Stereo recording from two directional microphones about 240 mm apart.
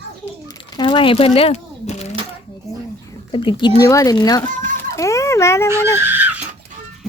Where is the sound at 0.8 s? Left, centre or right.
Left.